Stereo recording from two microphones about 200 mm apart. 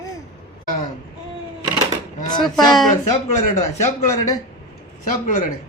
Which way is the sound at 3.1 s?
35° left (ahead or behind).